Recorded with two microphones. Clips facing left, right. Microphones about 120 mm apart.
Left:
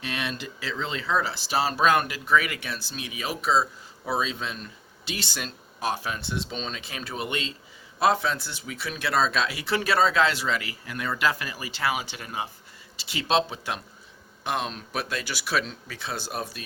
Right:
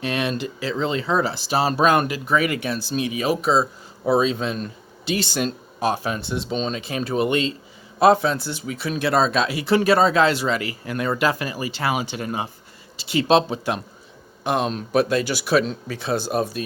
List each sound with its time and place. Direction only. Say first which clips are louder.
0.0 s a sound: right 8 dB; 55° right (ahead or behind)
0.4 s speech: right 8 dB; 45° right (ahead or behind)
1.0 s speech: right 1 dB; 30° right (ahead or behind)
1.5 s speech: right 4 dB; 40° right (ahead or behind)